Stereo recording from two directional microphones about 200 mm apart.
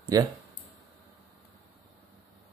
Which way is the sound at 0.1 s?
15° right (ahead or behind).